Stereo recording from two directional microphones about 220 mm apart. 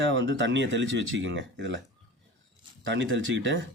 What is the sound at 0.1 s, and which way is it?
Speech, 55° right (ahead or behind).